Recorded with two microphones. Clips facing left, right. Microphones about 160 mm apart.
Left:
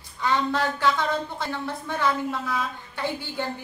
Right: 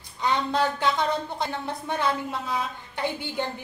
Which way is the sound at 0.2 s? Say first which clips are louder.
Even; 15° right (ahead or behind).